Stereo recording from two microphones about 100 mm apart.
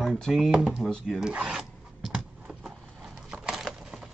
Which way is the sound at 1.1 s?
10° right (ahead or behind).